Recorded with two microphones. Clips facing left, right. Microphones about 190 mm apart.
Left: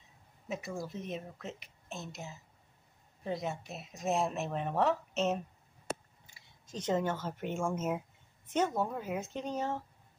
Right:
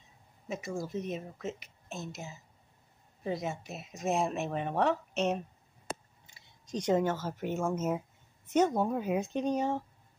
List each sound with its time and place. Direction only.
0.5 s speech: centre (ahead or behind)
6.2 s a sound: 15° right (ahead or behind)
8.5 s speech: 15° right (ahead or behind)